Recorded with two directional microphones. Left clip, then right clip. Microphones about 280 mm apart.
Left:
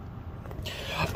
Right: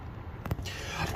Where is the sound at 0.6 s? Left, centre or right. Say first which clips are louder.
Left 5 dB; centre.